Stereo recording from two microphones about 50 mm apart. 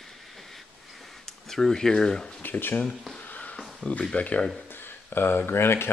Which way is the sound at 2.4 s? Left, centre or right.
Left.